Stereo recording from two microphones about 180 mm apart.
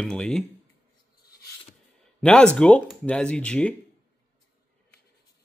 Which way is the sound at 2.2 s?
5° left (ahead or behind).